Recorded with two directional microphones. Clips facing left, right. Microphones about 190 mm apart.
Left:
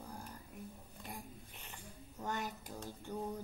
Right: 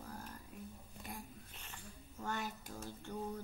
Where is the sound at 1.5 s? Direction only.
15° left (ahead or behind).